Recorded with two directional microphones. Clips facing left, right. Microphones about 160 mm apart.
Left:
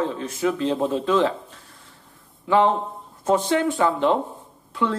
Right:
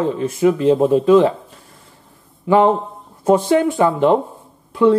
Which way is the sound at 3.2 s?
15° right (ahead or behind).